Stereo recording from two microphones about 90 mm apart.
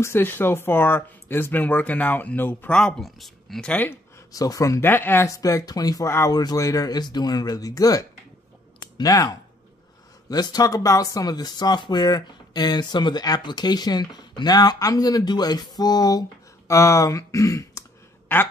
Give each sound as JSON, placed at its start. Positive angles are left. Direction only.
{"t": 0.0, "sound": "speech", "side_deg": 25}
{"t": 2.7, "sound": "speech", "side_deg": 10}
{"t": 3.6, "sound": "speech", "side_deg": 20}
{"t": 4.3, "sound": "speech", "side_deg": 40}
{"t": 4.8, "sound": "speech", "side_deg": 25}
{"t": 5.3, "sound": "speech", "side_deg": 40}
{"t": 10.3, "sound": "speech", "side_deg": 50}